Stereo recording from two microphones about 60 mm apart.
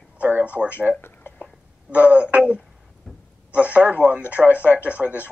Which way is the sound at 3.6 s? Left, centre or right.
Right.